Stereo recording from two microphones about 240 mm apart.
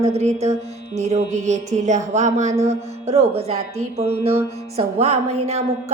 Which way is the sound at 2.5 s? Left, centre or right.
Centre.